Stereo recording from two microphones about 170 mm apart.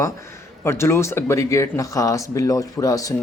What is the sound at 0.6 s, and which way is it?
Speech, 15° left (ahead or behind).